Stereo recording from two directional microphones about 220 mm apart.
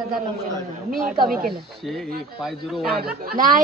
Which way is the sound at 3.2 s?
40° right (ahead or behind).